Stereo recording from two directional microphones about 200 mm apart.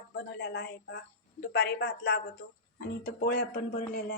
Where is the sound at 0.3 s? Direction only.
55° left (ahead or behind).